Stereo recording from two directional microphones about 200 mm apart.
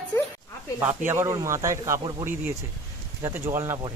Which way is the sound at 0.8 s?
10° right (ahead or behind).